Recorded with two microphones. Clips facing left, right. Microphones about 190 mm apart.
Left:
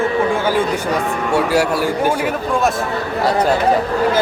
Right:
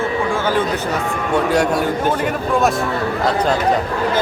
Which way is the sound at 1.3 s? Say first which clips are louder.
Even; 5° left (ahead or behind).